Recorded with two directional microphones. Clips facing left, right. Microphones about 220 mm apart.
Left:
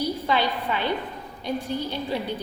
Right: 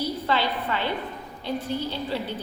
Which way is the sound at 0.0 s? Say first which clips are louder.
Left 1 dB; 15° left (ahead or behind).